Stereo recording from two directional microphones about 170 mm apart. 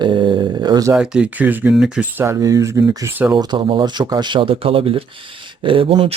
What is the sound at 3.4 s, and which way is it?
Speech, 25° right (ahead or behind).